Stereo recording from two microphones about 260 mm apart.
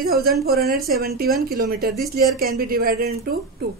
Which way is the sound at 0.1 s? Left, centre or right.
Right.